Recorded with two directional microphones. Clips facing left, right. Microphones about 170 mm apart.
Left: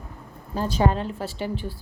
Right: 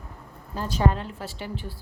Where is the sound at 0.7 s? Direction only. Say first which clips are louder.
Left 1 dB; 30° left (ahead or behind).